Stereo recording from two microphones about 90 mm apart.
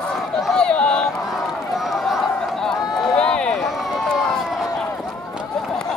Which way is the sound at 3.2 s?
10° left (ahead or behind).